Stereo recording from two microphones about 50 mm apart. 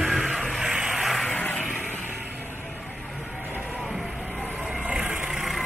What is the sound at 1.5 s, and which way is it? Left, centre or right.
Vehicle, centre.